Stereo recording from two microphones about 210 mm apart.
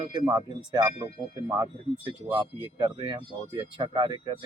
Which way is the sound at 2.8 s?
25° right (ahead or behind).